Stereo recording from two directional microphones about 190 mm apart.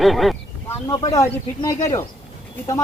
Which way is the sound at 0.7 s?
15° left (ahead or behind).